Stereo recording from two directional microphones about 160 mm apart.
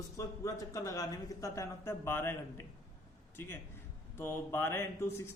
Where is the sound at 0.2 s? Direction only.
20° left (ahead or behind).